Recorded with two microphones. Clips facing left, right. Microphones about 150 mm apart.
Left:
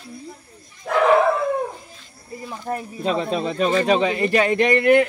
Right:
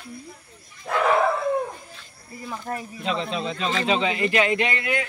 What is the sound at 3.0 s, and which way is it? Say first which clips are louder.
Speech: left 5 dB; 45° left (ahead or behind).